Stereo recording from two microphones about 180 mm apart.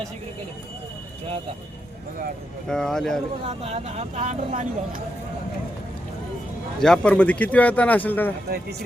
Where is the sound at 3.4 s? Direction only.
35° right (ahead or behind).